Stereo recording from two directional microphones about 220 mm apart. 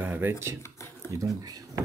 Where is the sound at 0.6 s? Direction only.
10° left (ahead or behind).